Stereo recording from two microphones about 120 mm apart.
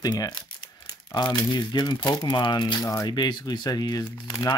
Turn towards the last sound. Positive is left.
turn(degrees=35)  # may be behind; listen again after turning